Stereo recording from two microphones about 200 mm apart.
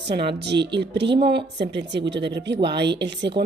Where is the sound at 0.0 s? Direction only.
55° right (ahead or behind).